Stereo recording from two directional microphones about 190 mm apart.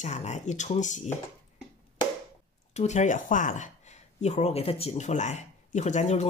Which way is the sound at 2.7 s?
35° left (ahead or behind).